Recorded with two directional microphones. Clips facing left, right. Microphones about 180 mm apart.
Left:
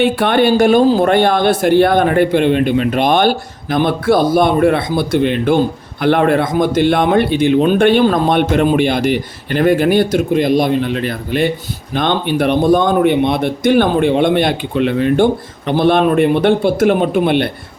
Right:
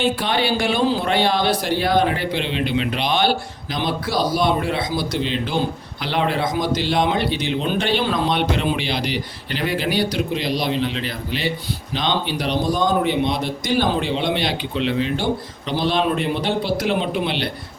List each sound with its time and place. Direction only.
0.0 s a man's voice: 55° left (ahead or behind)